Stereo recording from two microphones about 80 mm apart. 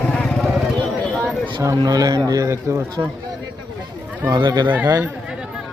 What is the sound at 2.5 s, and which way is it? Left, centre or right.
Speech, right.